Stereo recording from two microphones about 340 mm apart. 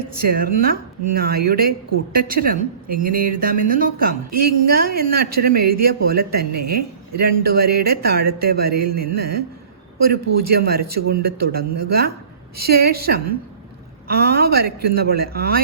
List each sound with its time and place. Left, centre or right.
0.1 s a man's voice: right
8.7 s music: right
9.0 s a man's voice: right
10.5 s a man's voice: right